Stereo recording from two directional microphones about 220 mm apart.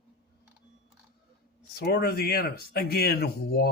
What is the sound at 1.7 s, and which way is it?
A man's voice, 45° left (ahead or behind).